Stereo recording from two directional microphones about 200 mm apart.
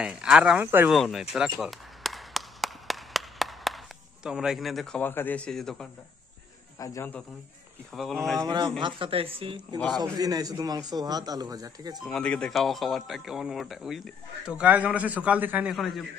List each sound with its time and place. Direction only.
0.0 s speech: 5° right (ahead or behind)
1.3 s a sound: centre (ahead or behind)
6.8 s a man's voice: 15° left (ahead or behind)
8.4 s a man's voice: 20° right (ahead or behind)
12.0 s speech: 5° left (ahead or behind)